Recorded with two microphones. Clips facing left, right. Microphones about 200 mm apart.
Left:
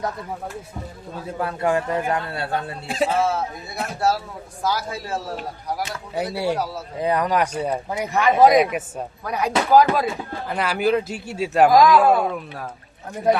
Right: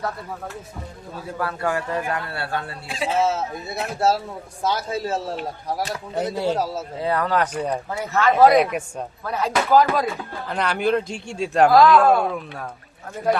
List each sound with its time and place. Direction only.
1.4 s a man's voice: 20° left (ahead or behind)
3.2 s a man's voice: 25° right (ahead or behind)
6.3 s speech: 10° left (ahead or behind)
6.6 s a man's voice: 25° right (ahead or behind)
7.0 s speech: 15° left (ahead or behind)
8.5 s speech: centre (ahead or behind)
9.2 s speech: 15° left (ahead or behind)